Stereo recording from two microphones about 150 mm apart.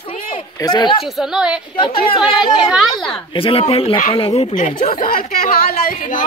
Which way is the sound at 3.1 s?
35° left (ahead or behind).